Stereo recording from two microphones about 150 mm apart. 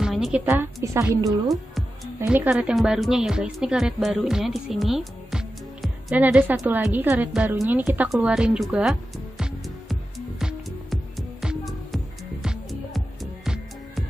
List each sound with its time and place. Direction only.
0.0 s a sound: 5° right (ahead or behind)
0.5 s a woman's voice: 15° right (ahead or behind)
2.2 s a woman's voice: 5° right (ahead or behind)
9.4 s music: centre (ahead or behind)